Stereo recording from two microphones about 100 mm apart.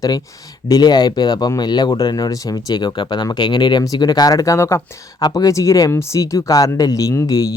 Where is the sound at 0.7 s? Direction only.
45° left (ahead or behind).